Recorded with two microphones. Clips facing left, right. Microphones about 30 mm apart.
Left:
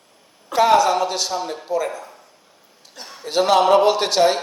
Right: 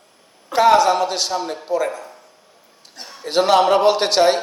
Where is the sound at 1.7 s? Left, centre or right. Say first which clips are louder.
Right 2 dB; right.